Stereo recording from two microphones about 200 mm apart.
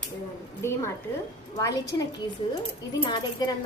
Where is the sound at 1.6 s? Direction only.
15° left (ahead or behind).